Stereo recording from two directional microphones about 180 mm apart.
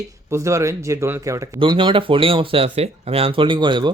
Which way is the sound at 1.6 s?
25° right (ahead or behind).